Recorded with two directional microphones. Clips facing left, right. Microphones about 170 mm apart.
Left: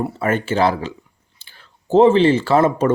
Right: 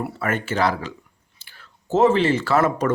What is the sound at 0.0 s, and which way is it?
Speech, 30° left (ahead or behind).